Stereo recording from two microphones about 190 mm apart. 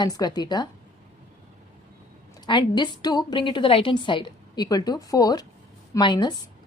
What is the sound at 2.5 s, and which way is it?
A woman's voice, 25° left (ahead or behind).